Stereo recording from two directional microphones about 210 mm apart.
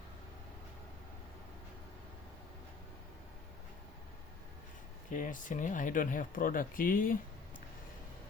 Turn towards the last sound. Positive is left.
turn(degrees=40)  # may be behind; listen again after turning